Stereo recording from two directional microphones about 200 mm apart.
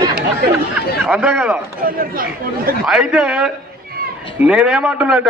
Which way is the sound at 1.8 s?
45° right (ahead or behind).